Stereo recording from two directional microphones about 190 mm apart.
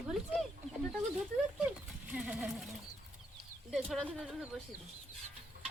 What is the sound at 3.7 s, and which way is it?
Speech, centre (ahead or behind).